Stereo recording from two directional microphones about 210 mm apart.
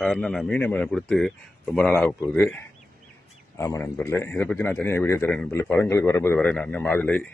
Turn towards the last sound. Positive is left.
turn(degrees=10)  # may be behind; listen again after turning